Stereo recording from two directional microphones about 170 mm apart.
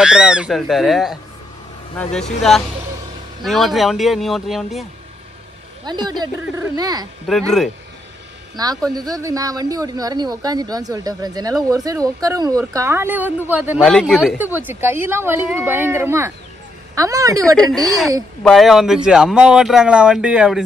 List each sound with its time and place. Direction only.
0.0 s speech: 5° right (ahead or behind)
2.1 s speech: 5° left (ahead or behind)
5.9 s speech: 25° right (ahead or behind)
7.3 s speech: centre (ahead or behind)
8.6 s a woman's voice: 20° right (ahead or behind)
17.7 s speech: centre (ahead or behind)